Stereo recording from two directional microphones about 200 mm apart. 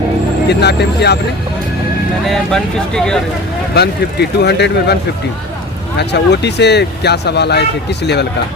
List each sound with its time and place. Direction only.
0.4 s speech: 55° left (ahead or behind)
2.2 s speech: centre (ahead or behind)
3.8 s speech: 55° left (ahead or behind)
6.0 s speech: 55° left (ahead or behind)